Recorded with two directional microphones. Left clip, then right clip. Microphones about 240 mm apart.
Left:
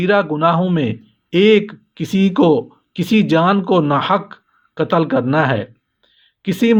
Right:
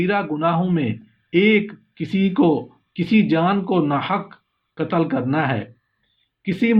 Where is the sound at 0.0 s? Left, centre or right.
Left.